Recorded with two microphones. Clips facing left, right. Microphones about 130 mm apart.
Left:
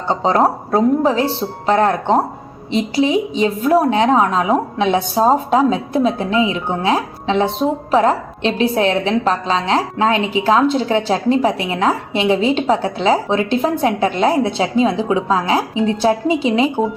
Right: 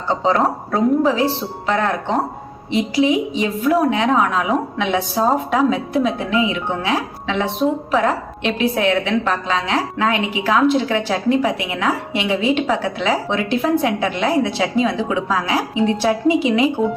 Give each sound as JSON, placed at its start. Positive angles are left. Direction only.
{"t": 0.1, "sound": "a woman's voice", "side_deg": 35}